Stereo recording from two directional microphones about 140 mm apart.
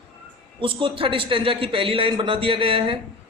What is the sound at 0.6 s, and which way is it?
A man's voice, 35° right (ahead or behind).